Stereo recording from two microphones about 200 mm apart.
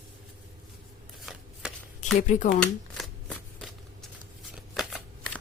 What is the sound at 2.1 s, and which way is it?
Speech, 40° left (ahead or behind).